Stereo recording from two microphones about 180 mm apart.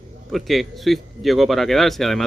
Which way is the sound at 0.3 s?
Centre (ahead or behind).